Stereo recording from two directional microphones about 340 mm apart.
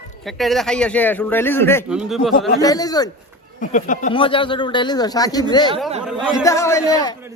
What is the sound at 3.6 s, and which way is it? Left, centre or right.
Speech, left.